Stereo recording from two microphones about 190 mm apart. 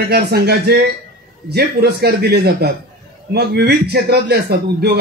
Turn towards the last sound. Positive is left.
turn(degrees=-55)  # may be behind; listen again after turning